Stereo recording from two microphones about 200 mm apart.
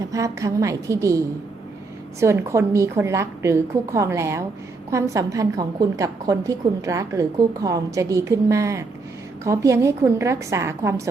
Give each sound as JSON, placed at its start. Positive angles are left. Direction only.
{"t": 0.0, "sound": "a woman's voice", "side_deg": -15}
{"t": 2.2, "sound": "a woman's voice", "side_deg": -15}